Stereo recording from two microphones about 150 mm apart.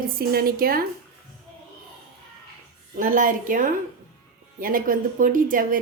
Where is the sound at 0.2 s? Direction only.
80° right.